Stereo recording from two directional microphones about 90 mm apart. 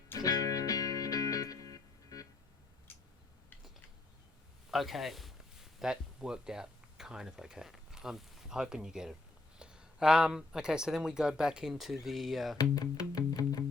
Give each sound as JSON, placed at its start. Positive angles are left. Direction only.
{"t": 0.2, "sound": "music", "side_deg": 45}
{"t": 4.7, "sound": "speech", "side_deg": 0}
{"t": 12.5, "sound": "music", "side_deg": 40}